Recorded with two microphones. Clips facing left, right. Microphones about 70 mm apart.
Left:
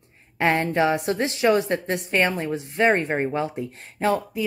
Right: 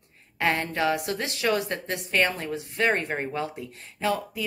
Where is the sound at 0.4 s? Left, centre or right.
Left.